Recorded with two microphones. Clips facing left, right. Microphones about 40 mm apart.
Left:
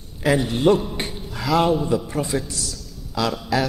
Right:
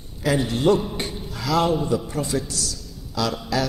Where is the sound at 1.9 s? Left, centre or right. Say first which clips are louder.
Left 1 dB; centre.